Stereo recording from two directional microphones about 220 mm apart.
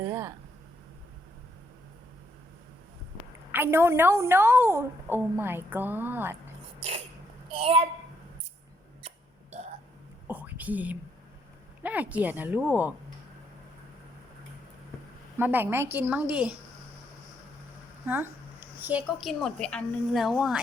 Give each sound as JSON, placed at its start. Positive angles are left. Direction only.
{"t": 0.0, "sound": "speech", "side_deg": -15}
{"t": 3.5, "sound": "a woman's voice", "side_deg": -10}
{"t": 7.5, "sound": "a woman's voice", "side_deg": -25}
{"t": 10.2, "sound": "whispering", "side_deg": -10}
{"t": 11.8, "sound": "a woman's voice", "side_deg": -5}
{"t": 15.4, "sound": "a woman's voice", "side_deg": -10}
{"t": 18.0, "sound": "a woman's voice", "side_deg": -10}